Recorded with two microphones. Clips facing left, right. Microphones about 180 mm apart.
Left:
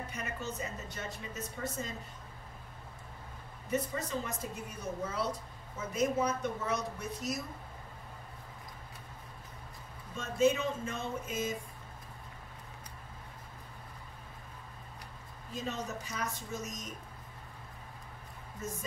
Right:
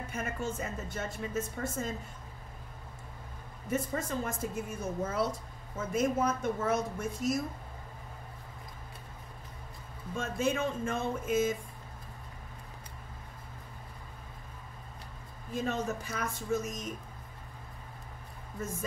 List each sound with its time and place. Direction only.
0.1 s a woman's voice: 50° right (ahead or behind)
3.7 s a woman's voice: 50° right (ahead or behind)
10.1 s a woman's voice: 50° right (ahead or behind)
15.5 s a woman's voice: 55° right (ahead or behind)